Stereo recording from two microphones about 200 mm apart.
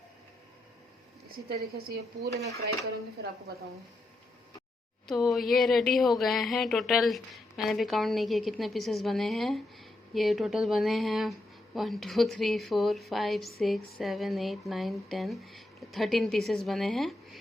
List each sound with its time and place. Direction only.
1.5 s speech: 50° right (ahead or behind)
5.0 s a woman's voice: centre (ahead or behind)